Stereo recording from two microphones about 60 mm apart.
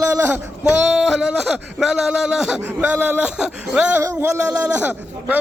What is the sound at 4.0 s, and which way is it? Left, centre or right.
Speech, right.